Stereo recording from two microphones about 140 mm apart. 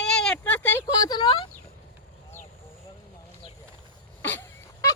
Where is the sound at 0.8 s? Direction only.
30° left (ahead or behind).